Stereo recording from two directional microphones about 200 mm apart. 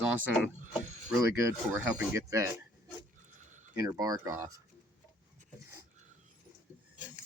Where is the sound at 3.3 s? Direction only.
40° right (ahead or behind).